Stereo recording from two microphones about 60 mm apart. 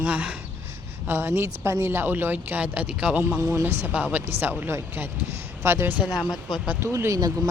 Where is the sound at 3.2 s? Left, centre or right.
Right.